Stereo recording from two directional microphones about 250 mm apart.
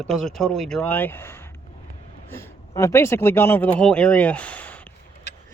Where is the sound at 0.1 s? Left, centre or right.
Centre.